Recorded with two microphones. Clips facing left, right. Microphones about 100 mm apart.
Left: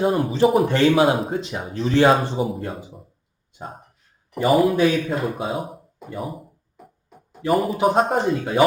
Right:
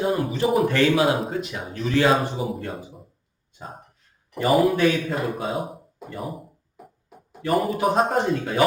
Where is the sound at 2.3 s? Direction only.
Centre (ahead or behind).